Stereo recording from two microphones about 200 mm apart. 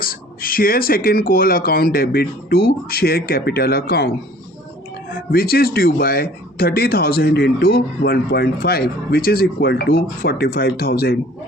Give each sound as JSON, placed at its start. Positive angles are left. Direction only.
{"t": 0.0, "sound": "speech", "side_deg": 45}